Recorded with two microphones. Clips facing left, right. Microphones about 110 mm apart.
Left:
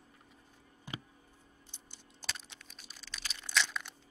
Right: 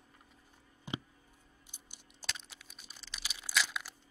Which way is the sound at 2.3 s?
Centre (ahead or behind).